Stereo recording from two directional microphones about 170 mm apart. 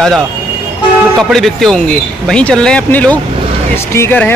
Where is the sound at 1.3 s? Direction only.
Centre (ahead or behind).